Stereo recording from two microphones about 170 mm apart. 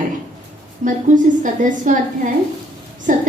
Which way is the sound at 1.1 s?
50° right (ahead or behind).